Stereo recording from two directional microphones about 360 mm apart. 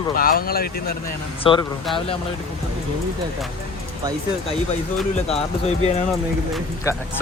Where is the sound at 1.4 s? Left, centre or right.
Centre.